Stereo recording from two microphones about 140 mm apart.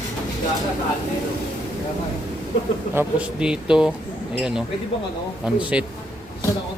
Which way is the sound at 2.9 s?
5° right (ahead or behind).